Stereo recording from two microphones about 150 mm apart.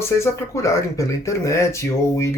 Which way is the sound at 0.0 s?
20° left (ahead or behind).